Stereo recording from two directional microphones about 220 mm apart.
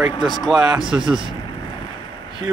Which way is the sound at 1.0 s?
20° right (ahead or behind).